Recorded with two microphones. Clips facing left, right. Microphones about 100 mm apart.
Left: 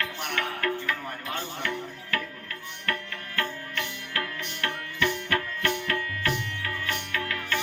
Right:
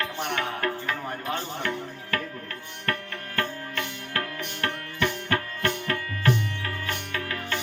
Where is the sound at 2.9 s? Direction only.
40° right (ahead or behind).